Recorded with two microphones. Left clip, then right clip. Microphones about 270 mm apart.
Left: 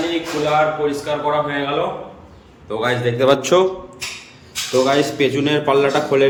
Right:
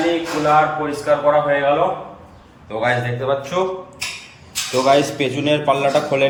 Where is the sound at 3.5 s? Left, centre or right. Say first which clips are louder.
Left 6 dB; centre.